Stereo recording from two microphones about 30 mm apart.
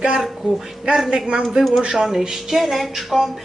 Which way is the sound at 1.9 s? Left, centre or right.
Right.